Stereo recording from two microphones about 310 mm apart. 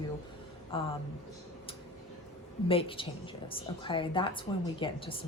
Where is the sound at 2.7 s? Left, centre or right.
Centre.